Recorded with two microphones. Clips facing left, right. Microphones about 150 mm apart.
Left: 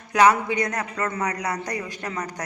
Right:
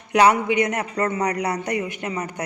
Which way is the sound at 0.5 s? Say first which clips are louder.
Right 5 dB; 20° right (ahead or behind).